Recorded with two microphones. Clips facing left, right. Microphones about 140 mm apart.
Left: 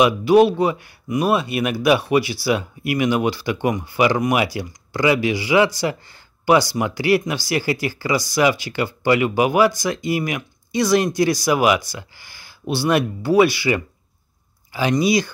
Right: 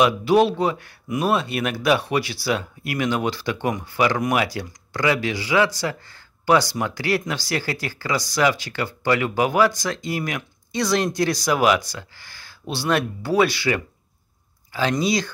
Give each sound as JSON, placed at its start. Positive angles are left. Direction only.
{"t": 0.0, "sound": "speech", "side_deg": 0}